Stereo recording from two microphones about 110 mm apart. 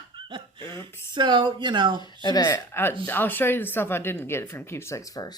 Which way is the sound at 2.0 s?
40° left (ahead or behind).